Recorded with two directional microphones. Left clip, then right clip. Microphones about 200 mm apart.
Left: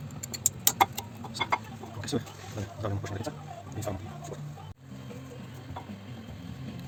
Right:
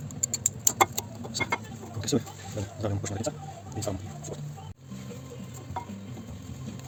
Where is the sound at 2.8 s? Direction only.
55° right (ahead or behind).